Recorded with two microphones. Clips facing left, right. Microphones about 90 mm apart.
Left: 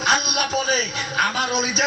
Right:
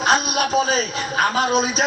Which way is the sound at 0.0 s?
35° right (ahead or behind).